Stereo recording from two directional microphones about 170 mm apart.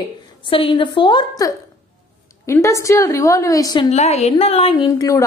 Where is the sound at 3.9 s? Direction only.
40° left (ahead or behind); by 5.2 s 20° left (ahead or behind).